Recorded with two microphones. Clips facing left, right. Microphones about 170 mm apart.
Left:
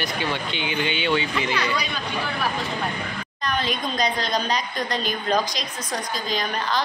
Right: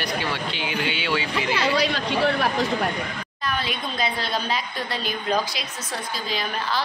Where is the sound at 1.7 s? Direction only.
80° right.